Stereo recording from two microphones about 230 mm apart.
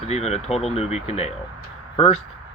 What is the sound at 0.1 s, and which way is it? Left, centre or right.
Speech, left.